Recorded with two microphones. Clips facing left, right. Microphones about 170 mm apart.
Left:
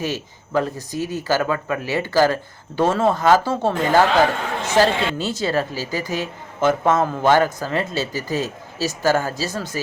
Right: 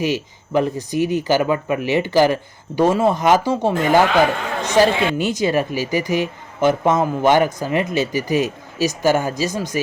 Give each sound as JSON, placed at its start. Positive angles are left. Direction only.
{"t": 0.0, "sound": "speech", "side_deg": -15}